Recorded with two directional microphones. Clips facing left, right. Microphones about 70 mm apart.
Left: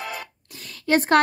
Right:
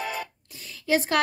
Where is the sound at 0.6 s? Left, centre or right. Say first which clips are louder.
Left 3 dB; left.